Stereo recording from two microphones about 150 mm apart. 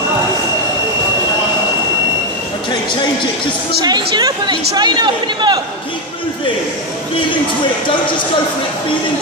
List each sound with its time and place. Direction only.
3.8 s speech: 30° right (ahead or behind)